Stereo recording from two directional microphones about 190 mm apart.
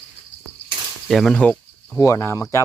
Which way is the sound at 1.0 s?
Centre (ahead or behind).